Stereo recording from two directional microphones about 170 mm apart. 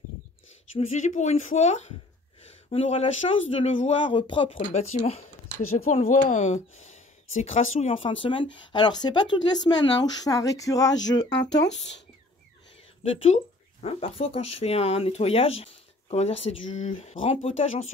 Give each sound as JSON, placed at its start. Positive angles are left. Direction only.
{"t": 0.7, "sound": "speech", "side_deg": 45}
{"t": 11.7, "sound": "speech", "side_deg": 90}
{"t": 13.0, "sound": "speech", "side_deg": 35}